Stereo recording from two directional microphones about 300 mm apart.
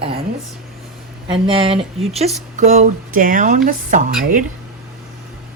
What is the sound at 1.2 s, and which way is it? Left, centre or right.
Speech, centre.